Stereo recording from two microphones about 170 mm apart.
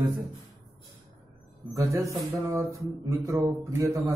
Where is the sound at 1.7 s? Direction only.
15° right (ahead or behind).